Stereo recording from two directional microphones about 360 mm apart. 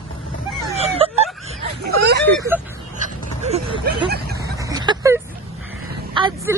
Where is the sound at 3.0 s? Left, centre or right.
Centre.